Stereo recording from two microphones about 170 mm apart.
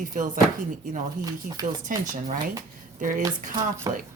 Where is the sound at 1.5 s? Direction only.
50° right (ahead or behind).